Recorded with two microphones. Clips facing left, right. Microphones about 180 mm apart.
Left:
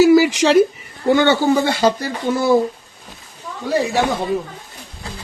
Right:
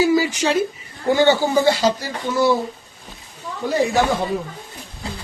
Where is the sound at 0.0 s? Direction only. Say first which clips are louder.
Left 6 dB; 85° left.